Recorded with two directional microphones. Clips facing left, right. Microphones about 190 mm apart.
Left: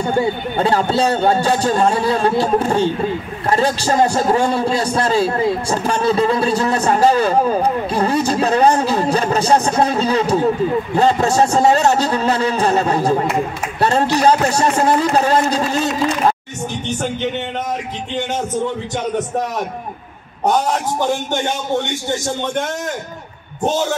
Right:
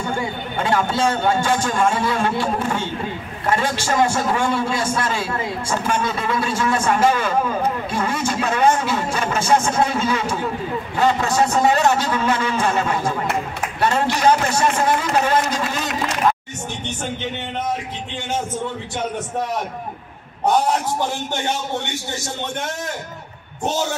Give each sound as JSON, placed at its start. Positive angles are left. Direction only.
{"t": 0.0, "sound": "a man's voice", "side_deg": 40}